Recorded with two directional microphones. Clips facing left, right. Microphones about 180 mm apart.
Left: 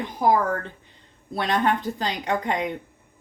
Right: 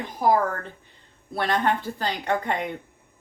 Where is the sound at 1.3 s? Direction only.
20° left (ahead or behind).